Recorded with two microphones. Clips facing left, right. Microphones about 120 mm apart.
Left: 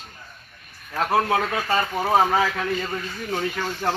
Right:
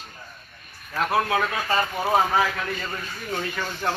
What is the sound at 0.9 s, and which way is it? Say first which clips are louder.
Speech: left 2 dB; 30° left (ahead or behind).